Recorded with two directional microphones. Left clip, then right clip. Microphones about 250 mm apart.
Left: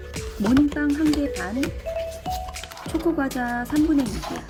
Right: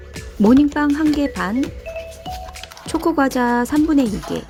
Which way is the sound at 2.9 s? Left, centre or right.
Right.